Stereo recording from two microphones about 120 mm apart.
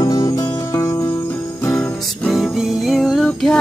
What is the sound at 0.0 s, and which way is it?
Music, 35° left (ahead or behind).